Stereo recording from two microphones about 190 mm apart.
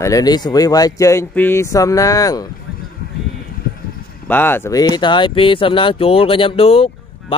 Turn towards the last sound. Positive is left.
turn(degrees=30)  # may be behind; listen again after turning